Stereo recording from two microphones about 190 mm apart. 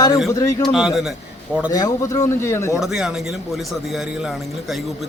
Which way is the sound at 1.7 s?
20° left (ahead or behind).